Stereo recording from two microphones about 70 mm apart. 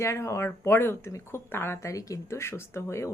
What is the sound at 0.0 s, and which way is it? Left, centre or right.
Speech, left.